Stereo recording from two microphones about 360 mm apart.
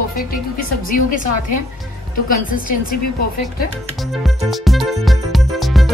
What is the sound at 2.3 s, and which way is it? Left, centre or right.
Speech, left.